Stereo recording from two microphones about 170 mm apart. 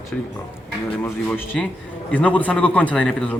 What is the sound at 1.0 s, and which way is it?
Speech, 10° left (ahead or behind).